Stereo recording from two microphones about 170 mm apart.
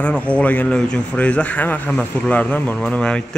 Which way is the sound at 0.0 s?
10° left (ahead or behind).